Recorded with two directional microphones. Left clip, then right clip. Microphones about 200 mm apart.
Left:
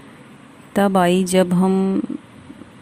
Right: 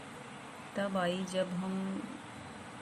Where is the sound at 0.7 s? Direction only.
55° left (ahead or behind).